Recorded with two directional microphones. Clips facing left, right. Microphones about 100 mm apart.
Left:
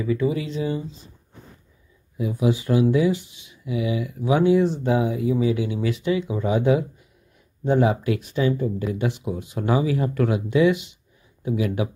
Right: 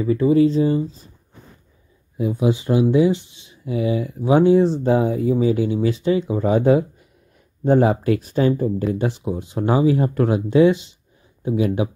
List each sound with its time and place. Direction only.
0.0 s speech: 35° right (ahead or behind)
2.1 s speech: 30° right (ahead or behind)